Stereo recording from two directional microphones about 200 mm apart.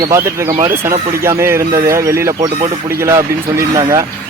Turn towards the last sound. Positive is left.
turn(degrees=-15)  # may be behind; listen again after turning